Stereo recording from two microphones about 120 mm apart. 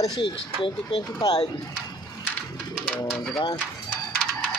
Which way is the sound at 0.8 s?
40° left (ahead or behind).